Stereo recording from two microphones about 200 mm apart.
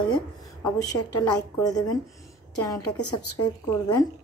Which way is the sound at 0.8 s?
20° left (ahead or behind).